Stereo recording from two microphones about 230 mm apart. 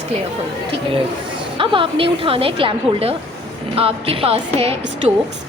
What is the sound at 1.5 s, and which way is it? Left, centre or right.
A woman's voice, right.